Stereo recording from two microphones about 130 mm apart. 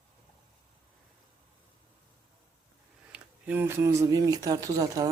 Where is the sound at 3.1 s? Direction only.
15° right (ahead or behind).